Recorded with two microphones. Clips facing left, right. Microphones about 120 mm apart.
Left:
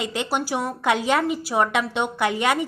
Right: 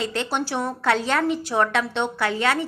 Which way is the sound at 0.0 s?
10° left (ahead or behind).